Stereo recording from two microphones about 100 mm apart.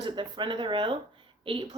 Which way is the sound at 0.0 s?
55° right (ahead or behind).